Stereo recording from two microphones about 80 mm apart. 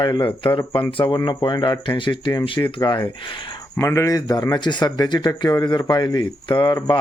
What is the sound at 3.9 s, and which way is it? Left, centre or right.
Speech, left.